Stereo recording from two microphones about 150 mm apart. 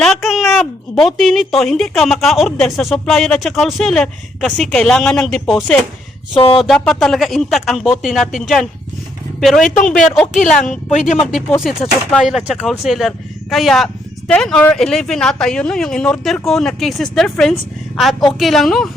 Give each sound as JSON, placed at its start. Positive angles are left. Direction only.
{"t": 0.0, "sound": "a child's voice", "side_deg": 0}
{"t": 6.3, "sound": "speech", "side_deg": 35}
{"t": 6.6, "sound": "a child's voice", "side_deg": 5}
{"t": 10.3, "sound": "a woman's voice", "side_deg": 55}
{"t": 12.1, "sound": "a child's voice", "side_deg": -5}